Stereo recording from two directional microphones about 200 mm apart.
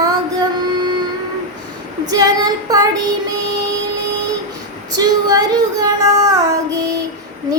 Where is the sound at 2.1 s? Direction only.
20° right (ahead or behind).